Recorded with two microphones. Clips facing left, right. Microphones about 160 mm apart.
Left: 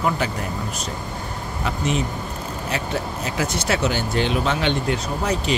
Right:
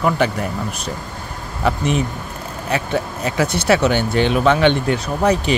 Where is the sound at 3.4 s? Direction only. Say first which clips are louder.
Right 7 dB; 65° right (ahead or behind).